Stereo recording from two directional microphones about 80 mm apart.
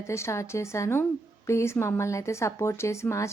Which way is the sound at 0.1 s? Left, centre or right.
Left.